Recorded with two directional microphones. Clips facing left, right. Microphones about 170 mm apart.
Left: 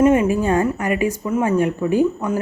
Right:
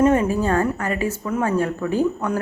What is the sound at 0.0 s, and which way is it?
Speech, 10° left (ahead or behind).